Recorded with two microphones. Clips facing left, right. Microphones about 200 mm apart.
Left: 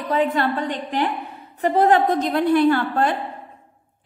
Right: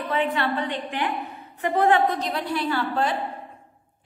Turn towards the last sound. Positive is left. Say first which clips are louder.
# left 5 dB
turn(degrees=55)  # may be behind; listen again after turning